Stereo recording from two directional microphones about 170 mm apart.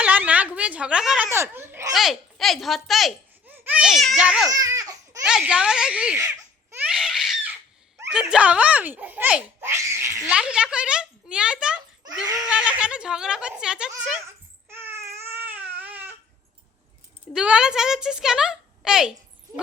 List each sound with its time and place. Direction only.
0.0 s a sound: 10° right (ahead or behind)
1.3 s speech: 15° right (ahead or behind)
1.9 s a woman's voice: centre (ahead or behind)
3.4 s speech: 10° right (ahead or behind)
4.4 s a sound: 20° right (ahead or behind)
5.2 s a woman's voice: 5° right (ahead or behind)
6.1 s laughter: 20° right (ahead or behind)
6.8 s screaming: 5° right (ahead or behind)
8.1 s speech: 5° right (ahead or behind)
10.3 s a woman's voice: 5° right (ahead or behind)
14.7 s baby cry: 15° right (ahead or behind)
17.3 s a woman's voice: 5° right (ahead or behind)